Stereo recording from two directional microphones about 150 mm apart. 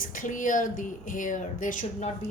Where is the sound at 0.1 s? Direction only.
60° left (ahead or behind).